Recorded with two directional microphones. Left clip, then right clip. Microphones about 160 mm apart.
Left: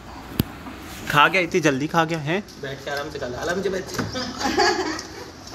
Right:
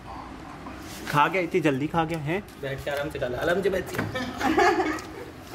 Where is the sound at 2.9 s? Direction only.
75° right (ahead or behind).